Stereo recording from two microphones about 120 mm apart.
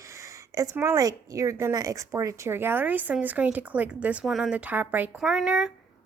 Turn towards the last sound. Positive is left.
turn(degrees=-5)  # may be behind; listen again after turning